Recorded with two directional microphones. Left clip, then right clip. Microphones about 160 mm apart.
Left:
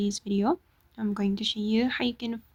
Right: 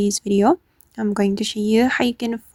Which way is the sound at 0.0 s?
50° right (ahead or behind).